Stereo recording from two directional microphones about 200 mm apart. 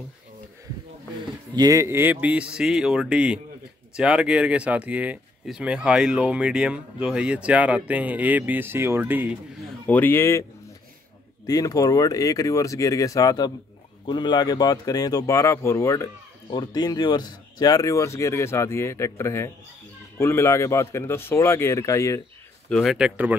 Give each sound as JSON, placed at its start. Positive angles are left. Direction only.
{"t": 1.5, "sound": "speech", "side_deg": -20}
{"t": 9.8, "sound": "speech", "side_deg": 10}
{"t": 11.4, "sound": "speech", "side_deg": 15}
{"t": 22.7, "sound": "speech", "side_deg": 0}